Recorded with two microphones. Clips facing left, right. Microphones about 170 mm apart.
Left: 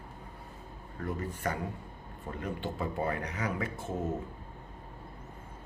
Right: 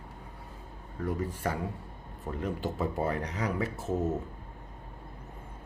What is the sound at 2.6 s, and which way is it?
Speech, 40° right (ahead or behind).